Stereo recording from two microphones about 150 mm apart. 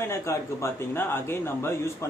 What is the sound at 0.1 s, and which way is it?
Speech, 20° left (ahead or behind).